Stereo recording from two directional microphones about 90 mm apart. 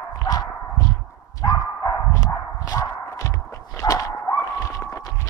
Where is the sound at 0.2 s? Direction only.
40° left (ahead or behind).